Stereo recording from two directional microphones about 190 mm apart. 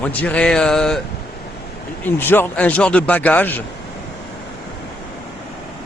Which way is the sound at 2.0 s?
10° left (ahead or behind).